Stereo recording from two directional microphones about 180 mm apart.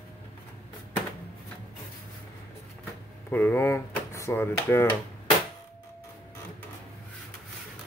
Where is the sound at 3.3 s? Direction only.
10° left (ahead or behind).